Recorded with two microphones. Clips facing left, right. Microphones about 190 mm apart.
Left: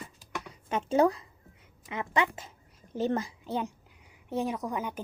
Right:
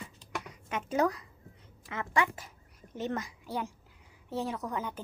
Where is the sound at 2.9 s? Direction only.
30° left (ahead or behind).